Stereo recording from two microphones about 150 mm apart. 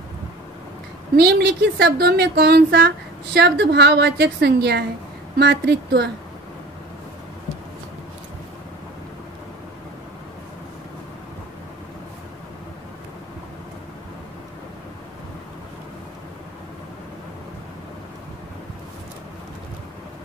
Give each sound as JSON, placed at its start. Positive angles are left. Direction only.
{"t": 1.1, "sound": "a woman's voice", "side_deg": -90}